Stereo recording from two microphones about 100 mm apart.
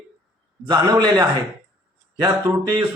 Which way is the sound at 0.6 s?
50° right (ahead or behind).